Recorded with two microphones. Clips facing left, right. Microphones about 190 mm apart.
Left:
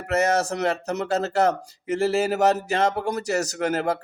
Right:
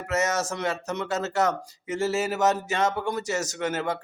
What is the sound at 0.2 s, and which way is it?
Speech, 35° left (ahead or behind).